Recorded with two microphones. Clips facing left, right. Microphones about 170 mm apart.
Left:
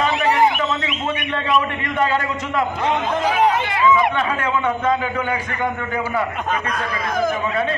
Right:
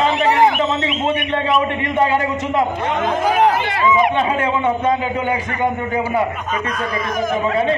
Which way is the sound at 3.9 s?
20° right (ahead or behind).